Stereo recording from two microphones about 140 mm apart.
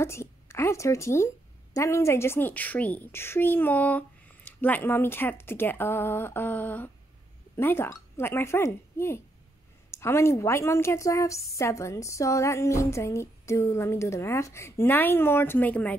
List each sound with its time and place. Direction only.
0.0 s a woman's voice: 20° left (ahead or behind)